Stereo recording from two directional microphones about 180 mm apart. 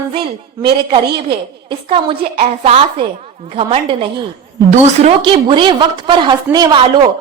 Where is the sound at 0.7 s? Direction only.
30° right (ahead or behind).